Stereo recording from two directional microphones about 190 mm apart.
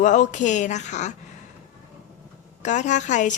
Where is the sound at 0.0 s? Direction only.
40° left (ahead or behind).